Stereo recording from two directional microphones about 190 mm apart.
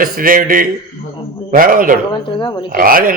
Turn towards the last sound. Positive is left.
turn(degrees=-50)  # may be behind; listen again after turning